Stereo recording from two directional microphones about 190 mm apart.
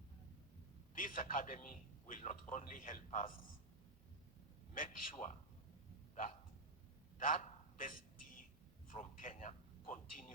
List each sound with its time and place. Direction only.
0.9 s a man's voice: 45° left (ahead or behind)
4.7 s a man's voice: 45° left (ahead or behind)
7.2 s a sound: 45° left (ahead or behind)